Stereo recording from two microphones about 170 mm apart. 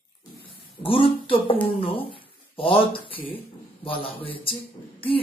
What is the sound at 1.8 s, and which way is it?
Speech, 35° left (ahead or behind).